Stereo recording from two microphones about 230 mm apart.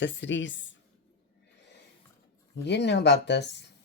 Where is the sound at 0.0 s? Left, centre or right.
Left.